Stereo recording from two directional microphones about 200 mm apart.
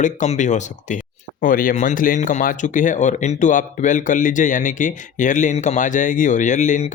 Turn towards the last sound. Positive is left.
turn(degrees=40)  # may be behind; listen again after turning